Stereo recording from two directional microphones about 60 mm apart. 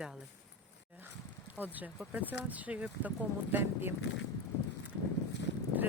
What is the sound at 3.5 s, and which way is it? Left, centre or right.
Speech, right.